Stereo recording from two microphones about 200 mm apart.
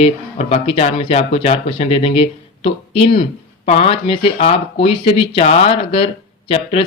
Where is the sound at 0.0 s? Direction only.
30° left (ahead or behind).